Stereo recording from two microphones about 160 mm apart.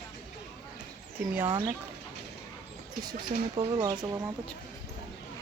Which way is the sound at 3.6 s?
25° right (ahead or behind).